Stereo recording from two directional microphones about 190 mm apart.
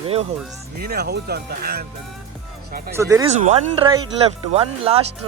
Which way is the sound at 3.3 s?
35° right (ahead or behind).